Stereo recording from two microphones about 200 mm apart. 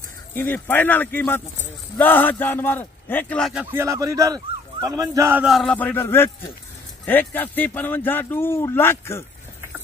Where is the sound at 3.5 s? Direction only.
10° right (ahead or behind).